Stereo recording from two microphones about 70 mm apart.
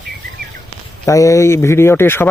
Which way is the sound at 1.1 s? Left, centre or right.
Left.